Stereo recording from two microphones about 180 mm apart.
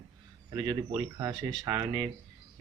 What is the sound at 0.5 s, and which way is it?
Speech, 25° right (ahead or behind).